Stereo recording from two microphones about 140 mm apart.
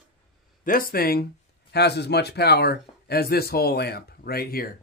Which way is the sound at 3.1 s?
90° left.